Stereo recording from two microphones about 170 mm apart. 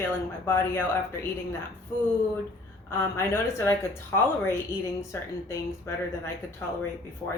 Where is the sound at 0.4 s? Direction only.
15° left (ahead or behind).